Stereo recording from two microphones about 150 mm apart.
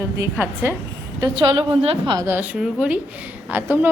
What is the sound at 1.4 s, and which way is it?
Speech, 35° right (ahead or behind).